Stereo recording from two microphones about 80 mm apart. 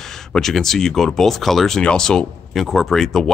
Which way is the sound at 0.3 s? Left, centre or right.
Centre.